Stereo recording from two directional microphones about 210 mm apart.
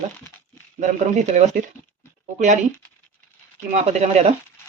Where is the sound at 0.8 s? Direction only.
35° right (ahead or behind).